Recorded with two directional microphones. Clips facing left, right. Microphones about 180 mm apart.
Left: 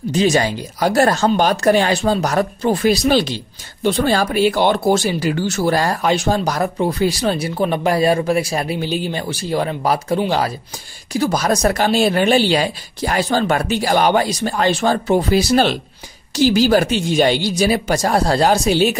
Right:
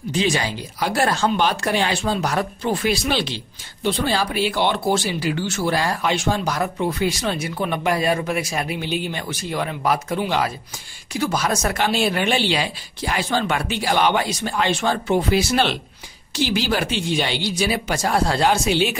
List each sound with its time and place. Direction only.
0.1 s speech: 45° left (ahead or behind)